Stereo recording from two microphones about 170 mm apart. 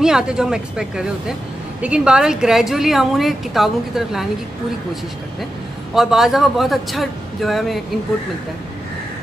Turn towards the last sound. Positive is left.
turn(degrees=0)  # may be behind; listen again after turning